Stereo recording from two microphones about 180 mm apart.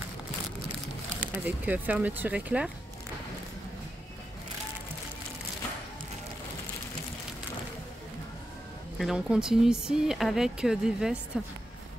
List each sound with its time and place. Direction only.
1.3 s speech: 10° right (ahead or behind)
8.9 s speech: centre (ahead or behind)